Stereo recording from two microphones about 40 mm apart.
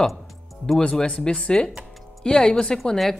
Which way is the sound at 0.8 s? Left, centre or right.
Left.